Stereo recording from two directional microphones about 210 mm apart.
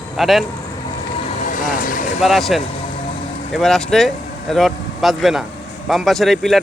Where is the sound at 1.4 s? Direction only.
40° left (ahead or behind).